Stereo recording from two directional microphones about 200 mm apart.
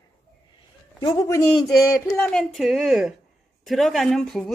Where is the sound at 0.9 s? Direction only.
20° left (ahead or behind).